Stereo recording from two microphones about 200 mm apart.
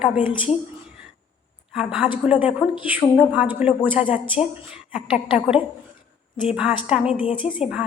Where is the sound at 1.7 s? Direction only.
5° right (ahead or behind).